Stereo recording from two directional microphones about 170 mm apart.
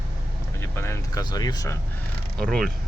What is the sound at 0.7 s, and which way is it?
Speech, 15° left (ahead or behind).